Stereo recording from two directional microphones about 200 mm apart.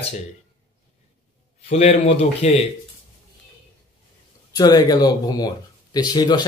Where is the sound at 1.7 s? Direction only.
35° left (ahead or behind).